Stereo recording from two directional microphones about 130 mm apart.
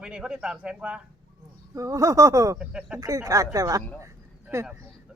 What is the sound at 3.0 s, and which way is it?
Speech, 25° right (ahead or behind).